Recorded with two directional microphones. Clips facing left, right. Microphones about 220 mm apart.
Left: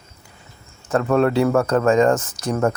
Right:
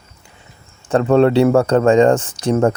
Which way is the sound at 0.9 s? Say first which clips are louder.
Right 5 dB; 30° right (ahead or behind).